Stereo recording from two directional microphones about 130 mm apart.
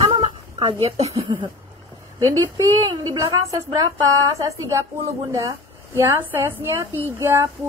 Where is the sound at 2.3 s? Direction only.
25° right (ahead or behind).